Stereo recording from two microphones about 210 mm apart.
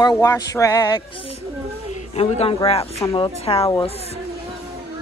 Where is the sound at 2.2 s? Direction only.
30° left (ahead or behind).